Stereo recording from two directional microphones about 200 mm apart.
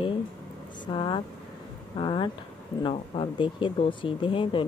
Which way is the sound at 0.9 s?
25° left (ahead or behind).